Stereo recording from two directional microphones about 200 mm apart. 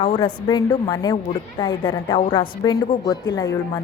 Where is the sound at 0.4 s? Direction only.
20° left (ahead or behind).